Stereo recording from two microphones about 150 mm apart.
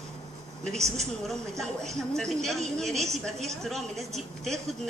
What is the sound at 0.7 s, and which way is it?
Speech, 45° right (ahead or behind).